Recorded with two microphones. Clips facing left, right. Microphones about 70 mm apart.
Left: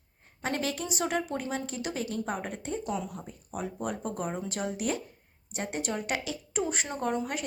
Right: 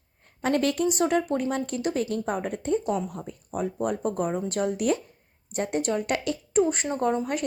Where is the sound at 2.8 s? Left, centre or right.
Right.